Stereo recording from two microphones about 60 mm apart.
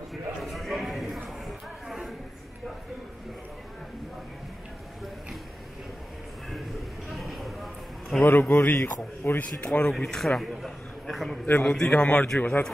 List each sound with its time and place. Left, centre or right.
0.1 s a sound: centre
7.1 s a sound: centre
8.2 s a man's voice: left
9.4 s a man's voice: left
9.9 s a man's voice: centre
11.6 s a man's voice: centre